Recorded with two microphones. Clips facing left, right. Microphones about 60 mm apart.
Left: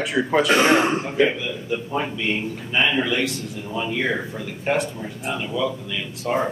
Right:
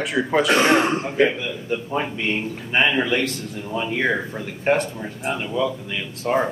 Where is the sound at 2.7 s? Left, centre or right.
Right.